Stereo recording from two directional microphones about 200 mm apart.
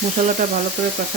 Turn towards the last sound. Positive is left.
turn(degrees=-40)  # may be behind; listen again after turning